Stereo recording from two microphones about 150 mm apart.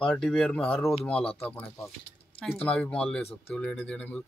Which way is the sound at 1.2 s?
40° left (ahead or behind).